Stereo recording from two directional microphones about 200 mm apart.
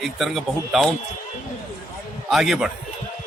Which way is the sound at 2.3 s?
Centre (ahead or behind).